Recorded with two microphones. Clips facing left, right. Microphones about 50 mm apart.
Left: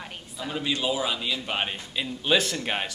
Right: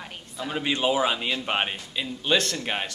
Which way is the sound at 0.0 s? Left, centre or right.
Centre.